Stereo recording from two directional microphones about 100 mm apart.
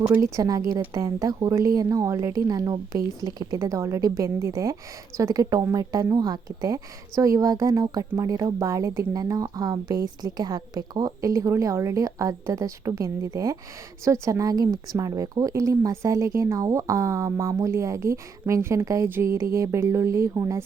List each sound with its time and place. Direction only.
0.3 s a woman's voice: 35° right (ahead or behind)
3.6 s a woman's voice: 30° right (ahead or behind)